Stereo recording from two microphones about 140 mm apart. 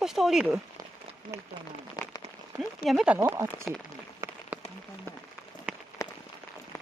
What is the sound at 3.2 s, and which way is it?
Speech, 20° right (ahead or behind).